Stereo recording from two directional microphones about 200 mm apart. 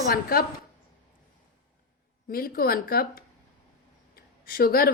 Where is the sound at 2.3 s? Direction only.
50° left (ahead or behind).